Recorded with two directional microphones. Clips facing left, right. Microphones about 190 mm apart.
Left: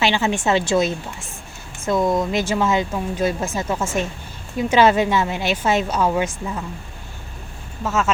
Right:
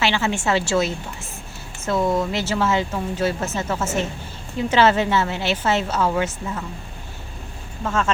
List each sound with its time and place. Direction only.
0.0 s a woman's voice: 15° left (ahead or behind)
7.9 s a woman's voice: 5° left (ahead or behind)